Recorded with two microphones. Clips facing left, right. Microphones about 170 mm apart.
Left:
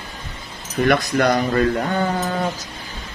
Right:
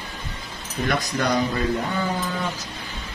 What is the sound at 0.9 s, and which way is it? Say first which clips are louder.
Speech: left 6 dB; 65° left (ahead or behind).